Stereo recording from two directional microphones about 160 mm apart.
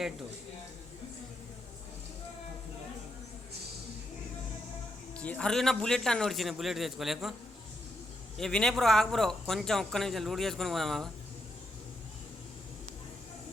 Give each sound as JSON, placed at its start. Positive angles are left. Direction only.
{"t": 5.1, "sound": "speech", "side_deg": 10}
{"t": 8.4, "sound": "speech", "side_deg": 0}